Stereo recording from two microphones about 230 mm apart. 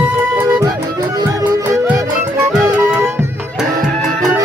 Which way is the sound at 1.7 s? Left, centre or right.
Centre.